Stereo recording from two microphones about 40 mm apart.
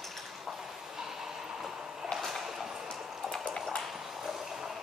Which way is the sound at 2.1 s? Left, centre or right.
Centre.